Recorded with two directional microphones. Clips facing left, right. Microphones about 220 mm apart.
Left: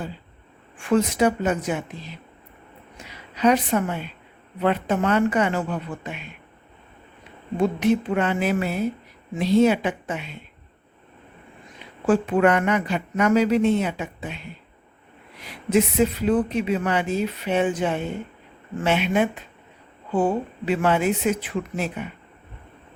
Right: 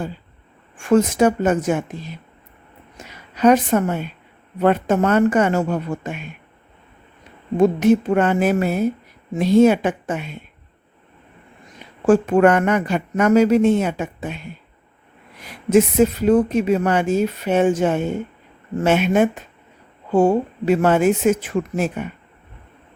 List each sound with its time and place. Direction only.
0.8 s a woman's voice: 45° right (ahead or behind)
7.5 s speech: 45° right (ahead or behind)
12.0 s speech: 45° right (ahead or behind)
15.4 s speech: 45° right (ahead or behind)